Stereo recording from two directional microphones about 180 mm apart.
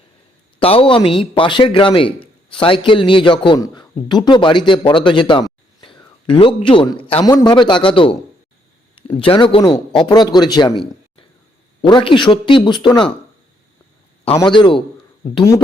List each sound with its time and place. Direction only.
0.6 s a man's voice: 30° left (ahead or behind)
14.3 s a man's voice: 25° left (ahead or behind)